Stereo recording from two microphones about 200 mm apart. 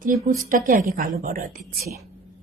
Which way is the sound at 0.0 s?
40° right (ahead or behind).